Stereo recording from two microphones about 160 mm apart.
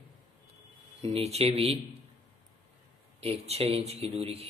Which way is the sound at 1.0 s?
40° right (ahead or behind).